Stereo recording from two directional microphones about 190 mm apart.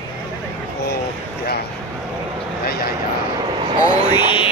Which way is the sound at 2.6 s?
55° left (ahead or behind).